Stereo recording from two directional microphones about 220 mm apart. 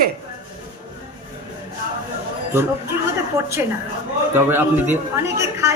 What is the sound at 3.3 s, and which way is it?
A woman's voice, 15° right (ahead or behind).